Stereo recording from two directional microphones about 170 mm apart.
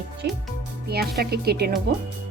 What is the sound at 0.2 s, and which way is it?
Speech, 80° right.